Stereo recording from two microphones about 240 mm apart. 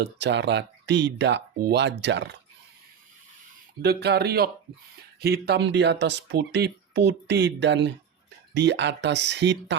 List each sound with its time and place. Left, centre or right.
0.0 s speech: right
3.8 s speech: right